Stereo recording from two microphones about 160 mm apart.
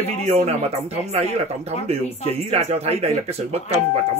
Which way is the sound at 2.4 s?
40° right (ahead or behind).